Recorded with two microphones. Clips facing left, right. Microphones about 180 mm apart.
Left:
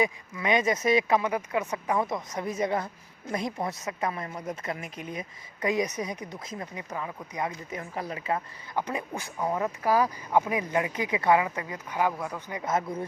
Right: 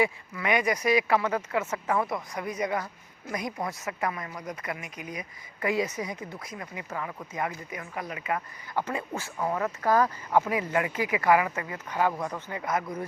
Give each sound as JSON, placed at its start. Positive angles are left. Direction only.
{"t": 0.0, "sound": "speech", "side_deg": 20}
{"t": 7.8, "sound": "speech", "side_deg": 35}
{"t": 8.7, "sound": "speech", "side_deg": 20}